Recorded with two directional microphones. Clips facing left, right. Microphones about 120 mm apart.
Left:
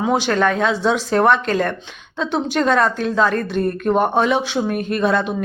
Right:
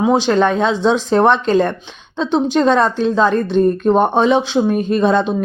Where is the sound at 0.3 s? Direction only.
25° right (ahead or behind).